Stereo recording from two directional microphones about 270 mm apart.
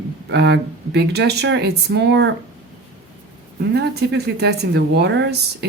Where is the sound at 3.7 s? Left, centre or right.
Right.